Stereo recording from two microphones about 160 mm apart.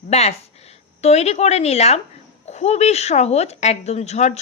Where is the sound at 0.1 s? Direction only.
40° left (ahead or behind).